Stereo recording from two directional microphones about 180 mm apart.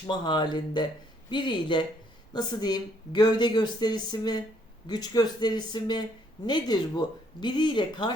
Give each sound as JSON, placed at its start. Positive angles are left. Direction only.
{"t": 0.1, "sound": "speech", "side_deg": 25}